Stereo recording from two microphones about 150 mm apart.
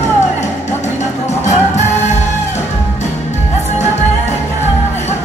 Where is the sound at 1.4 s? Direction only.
50° left (ahead or behind).